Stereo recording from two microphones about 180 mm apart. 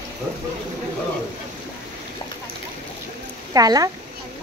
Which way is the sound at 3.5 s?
20° right (ahead or behind).